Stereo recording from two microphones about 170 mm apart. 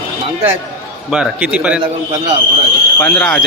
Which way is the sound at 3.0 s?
10° left (ahead or behind).